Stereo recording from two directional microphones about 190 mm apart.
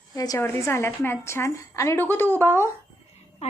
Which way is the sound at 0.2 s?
15° left (ahead or behind).